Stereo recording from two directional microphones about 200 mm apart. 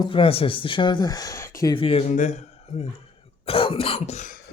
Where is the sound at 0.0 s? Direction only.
25° left (ahead or behind).